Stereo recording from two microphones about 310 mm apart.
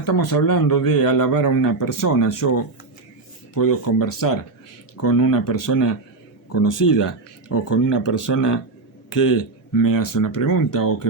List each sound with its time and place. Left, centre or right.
0.0 s speech: left
3.6 s speech: left
8.0 s speech: left